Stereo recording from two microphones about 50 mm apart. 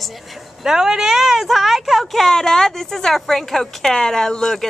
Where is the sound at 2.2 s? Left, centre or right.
Centre.